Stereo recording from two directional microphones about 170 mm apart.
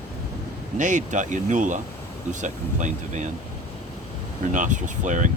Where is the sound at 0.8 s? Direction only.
45° right (ahead or behind).